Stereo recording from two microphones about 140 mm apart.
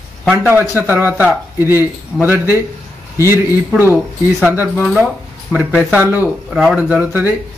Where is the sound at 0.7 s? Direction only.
15° right (ahead or behind).